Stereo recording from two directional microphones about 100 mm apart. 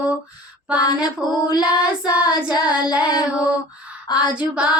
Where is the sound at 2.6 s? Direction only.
45° left (ahead or behind).